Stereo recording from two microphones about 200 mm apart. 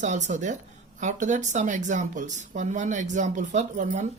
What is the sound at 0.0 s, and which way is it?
Speech, 35° right (ahead or behind).